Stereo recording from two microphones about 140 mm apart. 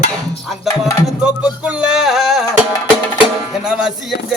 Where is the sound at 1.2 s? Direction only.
10° right (ahead or behind).